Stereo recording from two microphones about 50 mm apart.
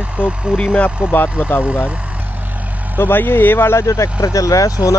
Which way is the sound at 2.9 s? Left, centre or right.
Left.